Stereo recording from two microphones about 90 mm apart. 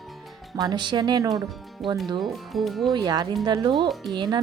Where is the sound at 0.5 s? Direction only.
45° right (ahead or behind).